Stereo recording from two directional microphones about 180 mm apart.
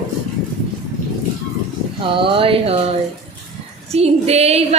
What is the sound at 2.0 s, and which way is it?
Speech, 30° right (ahead or behind).